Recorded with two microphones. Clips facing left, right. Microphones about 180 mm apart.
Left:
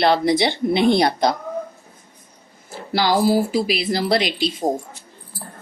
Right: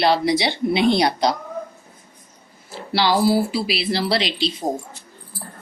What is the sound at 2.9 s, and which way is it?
Speech, 45° left (ahead or behind).